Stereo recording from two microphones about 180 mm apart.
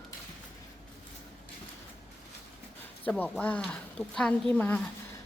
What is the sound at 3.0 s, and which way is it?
Speech, 10° left (ahead or behind).